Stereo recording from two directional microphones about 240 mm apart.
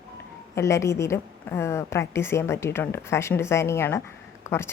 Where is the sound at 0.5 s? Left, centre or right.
Centre.